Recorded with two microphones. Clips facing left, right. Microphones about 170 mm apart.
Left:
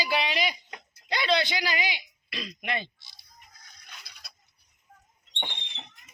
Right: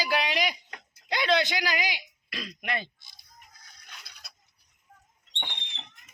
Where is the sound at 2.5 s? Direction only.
Centre (ahead or behind).